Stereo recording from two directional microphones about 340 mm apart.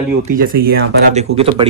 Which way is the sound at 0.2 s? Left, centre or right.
Right.